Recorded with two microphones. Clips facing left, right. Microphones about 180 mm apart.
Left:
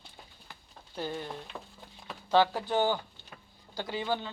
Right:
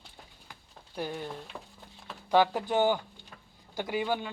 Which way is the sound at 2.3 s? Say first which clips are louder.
Right 1 dB; 15° right (ahead or behind).